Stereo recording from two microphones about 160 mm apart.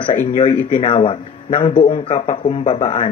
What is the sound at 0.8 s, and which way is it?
Speech, 35° left (ahead or behind).